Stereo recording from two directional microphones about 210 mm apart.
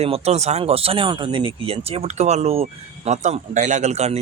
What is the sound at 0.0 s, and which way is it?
Speech, 30° right (ahead or behind).